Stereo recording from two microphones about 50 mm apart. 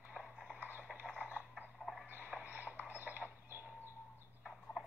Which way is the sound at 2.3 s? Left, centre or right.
Right.